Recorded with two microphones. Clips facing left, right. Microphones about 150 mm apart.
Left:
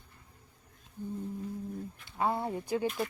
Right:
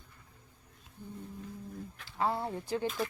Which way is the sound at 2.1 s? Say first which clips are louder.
Left 1 dB; 20° left (ahead or behind).